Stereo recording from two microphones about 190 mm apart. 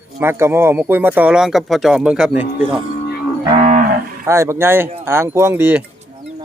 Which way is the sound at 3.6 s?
40° right (ahead or behind).